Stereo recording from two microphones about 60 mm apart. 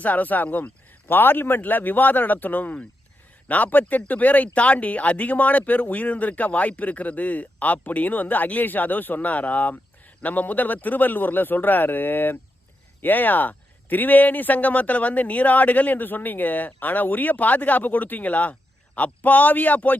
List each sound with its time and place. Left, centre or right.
0.0 s speech: left